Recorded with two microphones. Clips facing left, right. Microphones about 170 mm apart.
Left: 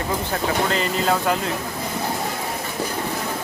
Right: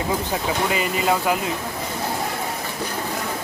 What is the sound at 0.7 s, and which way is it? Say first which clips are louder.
Speech: even; 5° right (ahead or behind).